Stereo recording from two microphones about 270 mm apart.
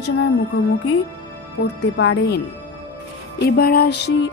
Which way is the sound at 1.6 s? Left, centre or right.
Left.